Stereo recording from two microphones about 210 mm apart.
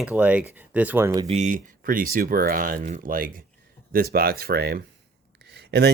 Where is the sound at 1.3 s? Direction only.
35° right (ahead or behind).